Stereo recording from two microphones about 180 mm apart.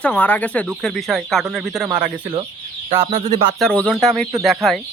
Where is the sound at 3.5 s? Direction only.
5° left (ahead or behind).